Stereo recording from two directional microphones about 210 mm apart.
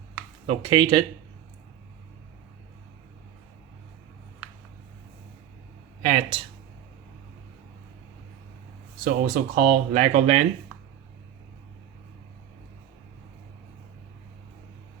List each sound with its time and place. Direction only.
0.4 s speech: 25° right (ahead or behind)
6.1 s speech: 30° right (ahead or behind)
9.0 s speech: 40° right (ahead or behind)